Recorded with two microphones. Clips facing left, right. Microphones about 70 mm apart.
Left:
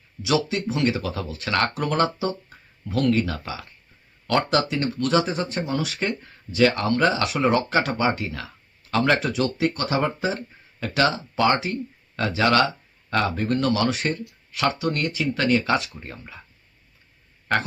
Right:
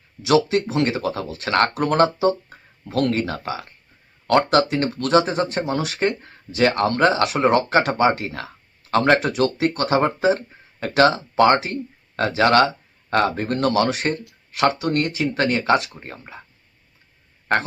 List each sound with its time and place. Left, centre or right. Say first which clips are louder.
0.2 s speech: right 6 dB; right